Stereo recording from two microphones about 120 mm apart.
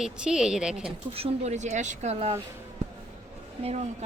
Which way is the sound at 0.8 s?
60° right (ahead or behind).